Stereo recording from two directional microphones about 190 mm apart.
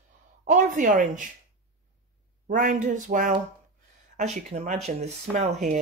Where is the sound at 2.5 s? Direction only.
40° right (ahead or behind).